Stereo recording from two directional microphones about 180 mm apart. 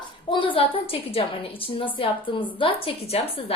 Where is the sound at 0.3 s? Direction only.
30° left (ahead or behind).